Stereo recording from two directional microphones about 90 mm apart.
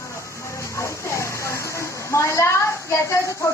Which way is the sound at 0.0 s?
30° left (ahead or behind).